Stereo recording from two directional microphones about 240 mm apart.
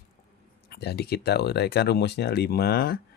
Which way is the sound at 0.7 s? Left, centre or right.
Left.